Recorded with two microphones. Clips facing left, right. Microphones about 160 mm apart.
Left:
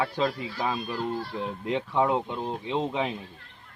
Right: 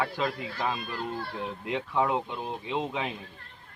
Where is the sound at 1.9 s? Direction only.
15° left (ahead or behind).